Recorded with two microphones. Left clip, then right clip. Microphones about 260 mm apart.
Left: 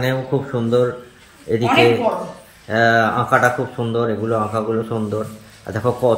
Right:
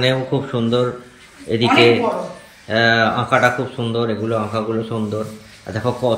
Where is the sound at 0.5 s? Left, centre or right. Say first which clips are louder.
Left 2 dB; centre.